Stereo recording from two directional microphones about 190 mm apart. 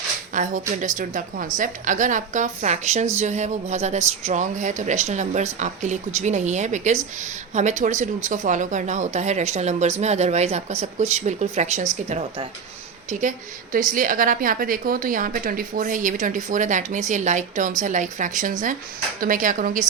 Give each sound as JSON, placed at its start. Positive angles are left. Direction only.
{"t": 0.3, "sound": "a woman's voice", "side_deg": -45}
{"t": 13.1, "sound": "a woman's voice", "side_deg": -40}